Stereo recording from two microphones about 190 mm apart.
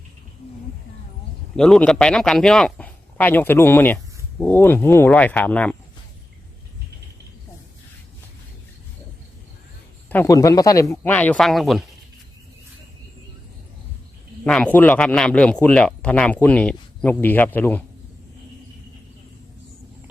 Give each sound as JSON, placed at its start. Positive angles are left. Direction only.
{"t": 1.5, "sound": "speech", "side_deg": 5}
{"t": 10.1, "sound": "speech", "side_deg": 15}
{"t": 11.0, "sound": "speech", "side_deg": 5}
{"t": 14.4, "sound": "speech", "side_deg": 5}